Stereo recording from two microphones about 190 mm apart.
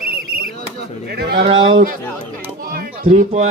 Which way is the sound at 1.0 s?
55° right (ahead or behind).